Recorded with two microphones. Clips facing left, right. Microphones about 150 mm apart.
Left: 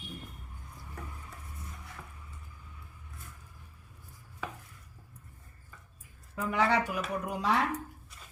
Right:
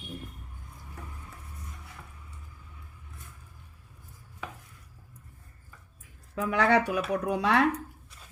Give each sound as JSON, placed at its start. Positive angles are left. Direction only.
{"t": 6.3, "sound": "speech", "side_deg": -85}